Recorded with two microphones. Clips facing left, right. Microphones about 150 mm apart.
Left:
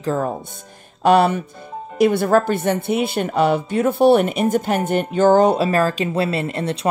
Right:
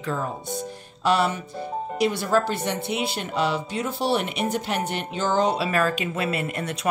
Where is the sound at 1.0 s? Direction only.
55° left (ahead or behind).